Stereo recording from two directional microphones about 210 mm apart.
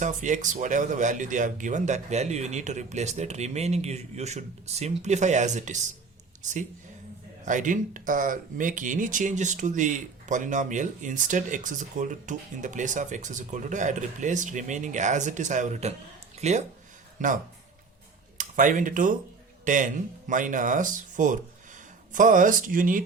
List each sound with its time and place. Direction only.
0.0 s speech: 35° right (ahead or behind)